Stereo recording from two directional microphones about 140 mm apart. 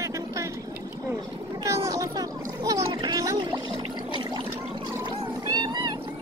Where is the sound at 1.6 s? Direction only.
25° right (ahead or behind).